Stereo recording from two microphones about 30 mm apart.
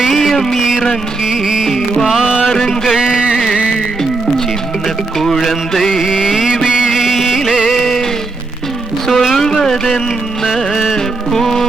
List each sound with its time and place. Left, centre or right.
0.1 s music: centre
1.3 s music: right
1.6 s music: centre
2.2 s music: right
6.1 s music: right
6.3 s mantra: centre
6.7 s music: right
9.1 s a sound: centre
10.4 s music: centre
10.9 s music: centre